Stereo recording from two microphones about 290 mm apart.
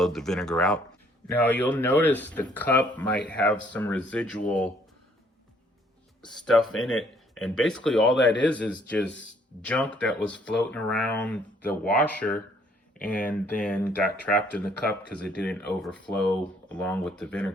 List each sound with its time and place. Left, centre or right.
0.0 s speech: centre
6.2 s speech: centre
8.1 s speech: left
8.4 s speech: centre